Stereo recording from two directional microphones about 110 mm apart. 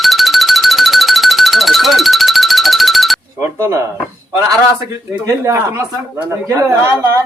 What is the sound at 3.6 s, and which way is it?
Speech, 25° right (ahead or behind).